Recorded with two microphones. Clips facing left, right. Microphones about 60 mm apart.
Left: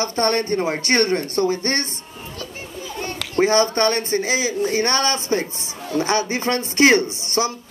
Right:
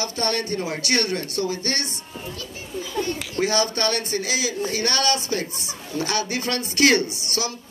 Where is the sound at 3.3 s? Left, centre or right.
Left.